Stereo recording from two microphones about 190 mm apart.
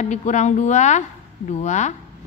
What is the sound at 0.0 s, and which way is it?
A woman's voice, 35° left (ahead or behind).